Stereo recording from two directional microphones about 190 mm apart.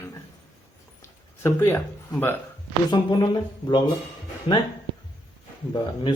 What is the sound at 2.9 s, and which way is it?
Speech, 20° left (ahead or behind).